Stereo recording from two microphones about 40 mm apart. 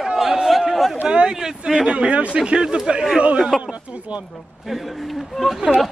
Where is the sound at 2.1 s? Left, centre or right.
Right.